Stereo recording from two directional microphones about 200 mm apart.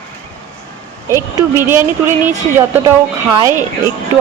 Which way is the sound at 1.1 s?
15° right (ahead or behind).